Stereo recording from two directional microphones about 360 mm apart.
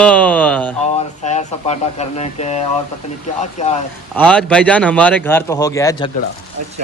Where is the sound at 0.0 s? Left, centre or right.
Centre.